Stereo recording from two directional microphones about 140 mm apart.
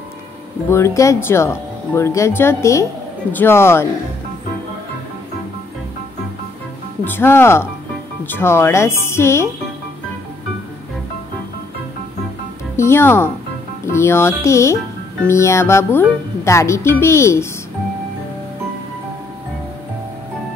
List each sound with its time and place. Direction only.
0.7 s speech: 20° left (ahead or behind)
7.1 s speech: 15° left (ahead or behind)
12.7 s speech: 20° left (ahead or behind)